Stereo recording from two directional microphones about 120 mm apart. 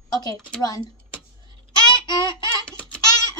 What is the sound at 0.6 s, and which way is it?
Speech, 30° left (ahead or behind).